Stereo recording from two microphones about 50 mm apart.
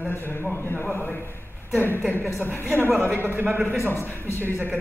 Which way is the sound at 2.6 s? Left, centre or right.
Right.